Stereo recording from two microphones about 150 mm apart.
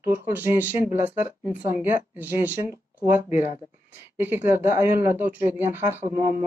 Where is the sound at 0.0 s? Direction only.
15° right (ahead or behind).